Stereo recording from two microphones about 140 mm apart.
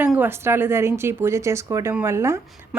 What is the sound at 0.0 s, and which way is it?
Speech, 15° right (ahead or behind).